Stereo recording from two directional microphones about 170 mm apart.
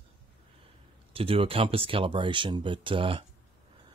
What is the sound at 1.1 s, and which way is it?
Speech, 35° right (ahead or behind).